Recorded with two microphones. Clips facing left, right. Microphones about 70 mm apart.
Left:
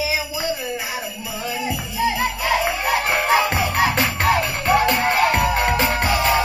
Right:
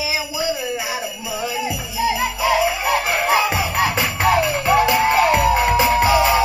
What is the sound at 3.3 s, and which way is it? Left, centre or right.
Music, centre.